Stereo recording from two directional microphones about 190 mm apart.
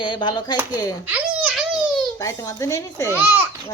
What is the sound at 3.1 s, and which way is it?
Speech, 10° right (ahead or behind).